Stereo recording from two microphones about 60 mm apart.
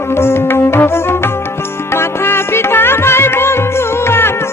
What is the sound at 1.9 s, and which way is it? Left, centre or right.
Music, left.